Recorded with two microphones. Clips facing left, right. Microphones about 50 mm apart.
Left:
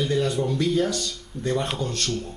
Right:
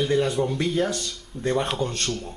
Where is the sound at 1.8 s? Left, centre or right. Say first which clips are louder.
Right 1 dB; centre.